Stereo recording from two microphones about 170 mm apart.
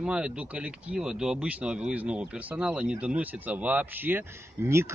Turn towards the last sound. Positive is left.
turn(degrees=-15)  # may be behind; listen again after turning